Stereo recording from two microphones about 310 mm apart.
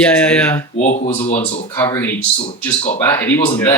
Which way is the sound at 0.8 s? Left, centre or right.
Left.